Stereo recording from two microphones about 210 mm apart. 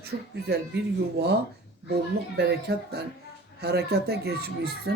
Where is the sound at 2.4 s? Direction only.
50° right (ahead or behind).